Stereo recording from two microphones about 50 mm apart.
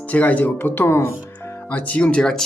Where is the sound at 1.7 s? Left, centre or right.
Left.